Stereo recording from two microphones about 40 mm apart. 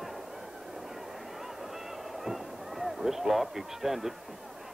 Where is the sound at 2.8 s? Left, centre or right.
Centre.